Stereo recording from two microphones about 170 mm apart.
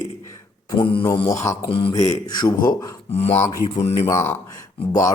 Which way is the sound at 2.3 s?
25° left (ahead or behind).